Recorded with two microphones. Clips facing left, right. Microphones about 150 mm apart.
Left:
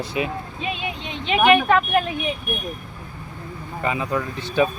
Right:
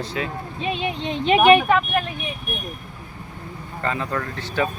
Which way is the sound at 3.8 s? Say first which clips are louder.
Left 2 dB; 15° left (ahead or behind).